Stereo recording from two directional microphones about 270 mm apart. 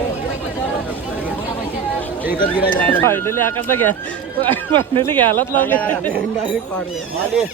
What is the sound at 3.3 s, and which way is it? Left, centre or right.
Speech, right.